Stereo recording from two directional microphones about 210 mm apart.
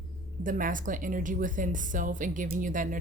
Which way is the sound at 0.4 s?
40° right (ahead or behind).